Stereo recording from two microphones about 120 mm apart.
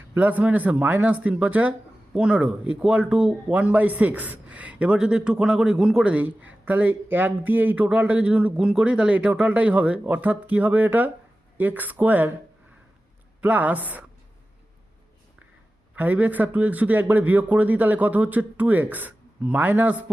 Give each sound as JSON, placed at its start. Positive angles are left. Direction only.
{"t": 0.1, "sound": "speech", "side_deg": -15}
{"t": 13.4, "sound": "speech", "side_deg": -15}
{"t": 16.0, "sound": "speech", "side_deg": -15}